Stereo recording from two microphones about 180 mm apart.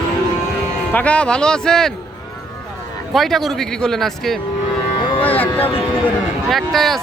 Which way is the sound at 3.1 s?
Centre (ahead or behind).